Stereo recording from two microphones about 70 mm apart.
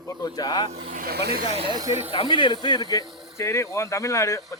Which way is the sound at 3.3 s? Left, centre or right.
Left.